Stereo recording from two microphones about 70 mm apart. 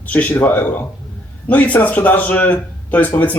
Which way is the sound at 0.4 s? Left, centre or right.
Left.